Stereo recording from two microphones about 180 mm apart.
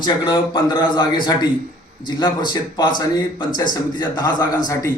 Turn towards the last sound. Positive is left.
turn(degrees=20)  # may be behind; listen again after turning